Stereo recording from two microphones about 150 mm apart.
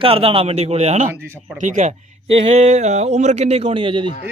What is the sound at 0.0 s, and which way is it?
Speech, 35° right (ahead or behind).